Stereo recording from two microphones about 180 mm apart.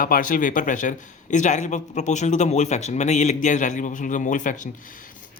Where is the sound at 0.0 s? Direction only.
50° left (ahead or behind).